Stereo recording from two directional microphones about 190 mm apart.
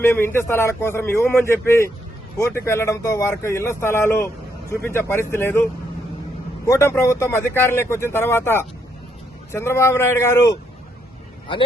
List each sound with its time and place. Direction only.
0.0 s speech: 10° left (ahead or behind)
6.7 s speech: 15° left (ahead or behind)
11.5 s speech: 25° left (ahead or behind)